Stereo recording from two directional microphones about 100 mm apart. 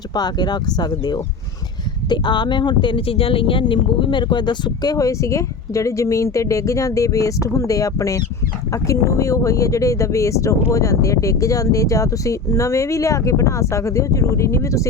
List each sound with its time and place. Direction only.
0.1 s speech: 45° left (ahead or behind)